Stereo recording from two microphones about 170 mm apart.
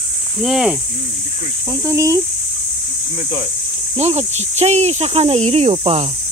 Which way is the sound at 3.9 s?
40° right (ahead or behind).